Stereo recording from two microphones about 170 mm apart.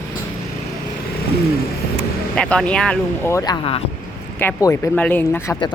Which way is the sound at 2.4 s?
5° left (ahead or behind).